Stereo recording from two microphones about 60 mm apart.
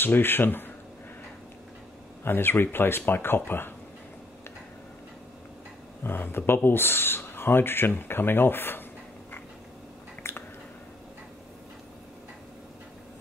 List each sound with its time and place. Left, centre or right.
0.0 s speech: left
2.2 s speech: left
6.0 s speech: left
10.3 s biting: left